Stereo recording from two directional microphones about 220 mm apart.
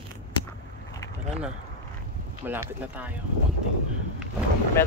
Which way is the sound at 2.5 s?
10° right (ahead or behind).